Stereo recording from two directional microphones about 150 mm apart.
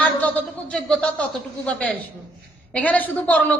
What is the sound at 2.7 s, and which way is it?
Speech, 10° left (ahead or behind).